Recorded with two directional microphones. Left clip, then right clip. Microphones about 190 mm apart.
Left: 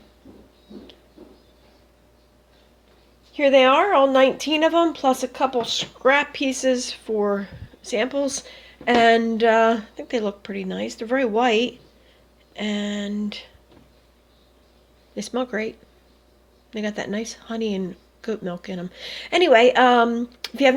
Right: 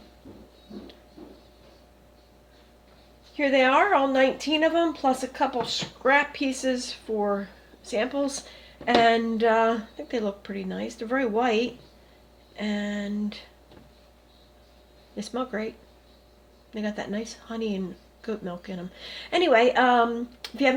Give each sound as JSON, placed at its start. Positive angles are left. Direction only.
{"t": 3.3, "sound": "speech", "side_deg": 40}
{"t": 15.1, "sound": "speech", "side_deg": 35}
{"t": 16.7, "sound": "speech", "side_deg": 35}